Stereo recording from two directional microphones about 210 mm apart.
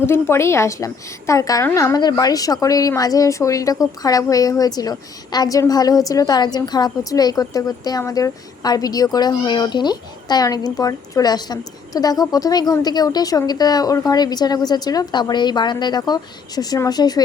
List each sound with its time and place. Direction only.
0.0 s a woman's voice: 10° left (ahead or behind)